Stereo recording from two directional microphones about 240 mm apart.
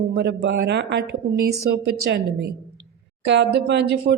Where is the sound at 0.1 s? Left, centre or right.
Right.